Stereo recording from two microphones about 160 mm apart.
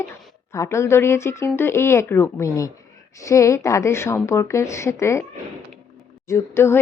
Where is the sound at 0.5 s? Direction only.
20° left (ahead or behind).